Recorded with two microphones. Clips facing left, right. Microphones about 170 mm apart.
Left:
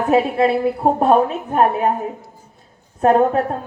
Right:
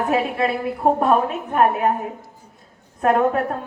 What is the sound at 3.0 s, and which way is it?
Speech, 30° left (ahead or behind).